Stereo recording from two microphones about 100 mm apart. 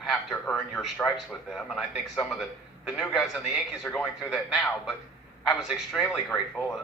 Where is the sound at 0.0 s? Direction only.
Centre (ahead or behind).